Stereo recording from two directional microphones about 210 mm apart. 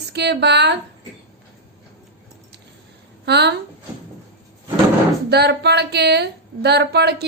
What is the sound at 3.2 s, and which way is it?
Speech, 50° right (ahead or behind).